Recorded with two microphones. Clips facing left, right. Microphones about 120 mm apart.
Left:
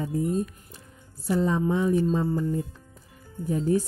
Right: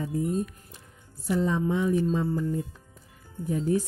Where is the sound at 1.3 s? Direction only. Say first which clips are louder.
Left 2 dB; 35° left (ahead or behind).